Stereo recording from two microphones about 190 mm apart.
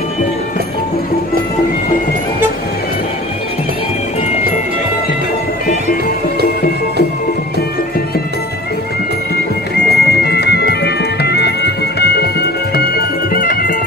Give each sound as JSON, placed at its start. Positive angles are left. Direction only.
{"t": 9.8, "sound": "music", "side_deg": 60}